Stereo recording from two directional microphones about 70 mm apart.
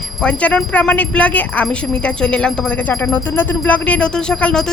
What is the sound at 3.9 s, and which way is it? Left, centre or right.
Speech, centre.